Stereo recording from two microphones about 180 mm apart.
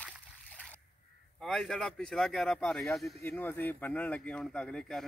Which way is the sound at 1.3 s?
Centre (ahead or behind).